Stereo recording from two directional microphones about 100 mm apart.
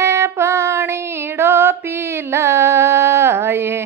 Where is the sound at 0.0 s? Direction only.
30° right (ahead or behind).